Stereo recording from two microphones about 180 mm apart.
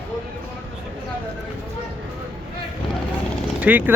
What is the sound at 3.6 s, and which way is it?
Speech, 10° right (ahead or behind).